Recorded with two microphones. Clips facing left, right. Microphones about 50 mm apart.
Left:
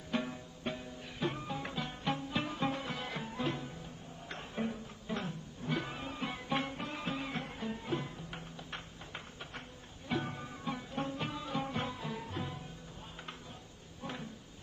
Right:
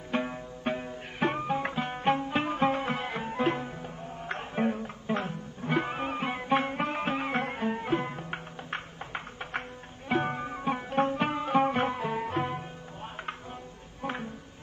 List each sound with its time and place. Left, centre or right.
0.1 s music: right
14.0 s music: right